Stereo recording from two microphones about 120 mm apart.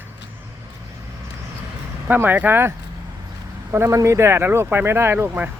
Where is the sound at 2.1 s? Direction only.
15° right (ahead or behind).